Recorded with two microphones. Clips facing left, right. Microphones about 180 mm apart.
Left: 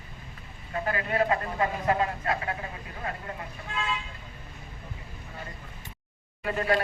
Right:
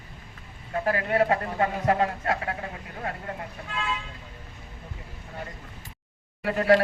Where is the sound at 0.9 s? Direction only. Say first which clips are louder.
Right 3 dB; 65° right (ahead or behind).